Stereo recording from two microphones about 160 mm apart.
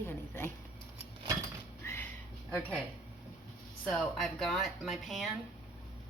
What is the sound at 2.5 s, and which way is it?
Speech, 10° left (ahead or behind).